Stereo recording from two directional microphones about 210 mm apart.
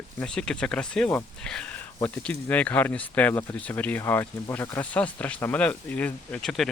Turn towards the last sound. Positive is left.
turn(degrees=0)  # may be behind; listen again after turning